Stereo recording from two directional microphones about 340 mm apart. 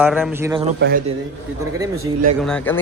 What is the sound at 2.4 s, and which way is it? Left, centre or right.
Speech, centre.